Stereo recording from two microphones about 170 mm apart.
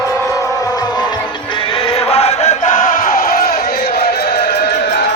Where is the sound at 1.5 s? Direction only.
35° left (ahead or behind).